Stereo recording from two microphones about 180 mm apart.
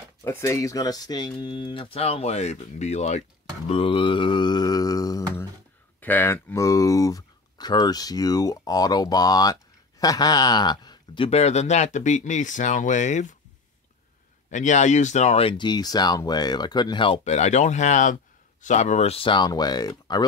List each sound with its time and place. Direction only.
0.2 s speech: 15° left (ahead or behind); by 3.2 s 40° left (ahead or behind)
3.6 s mantra: 30° left (ahead or behind)
5.9 s speech: 10° left (ahead or behind)
11.2 s speech: 35° left (ahead or behind)
14.5 s speech: 40° left (ahead or behind); by 20.2 s 20° left (ahead or behind)